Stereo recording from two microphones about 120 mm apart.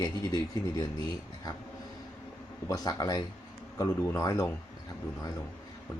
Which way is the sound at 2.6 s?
30° left (ahead or behind).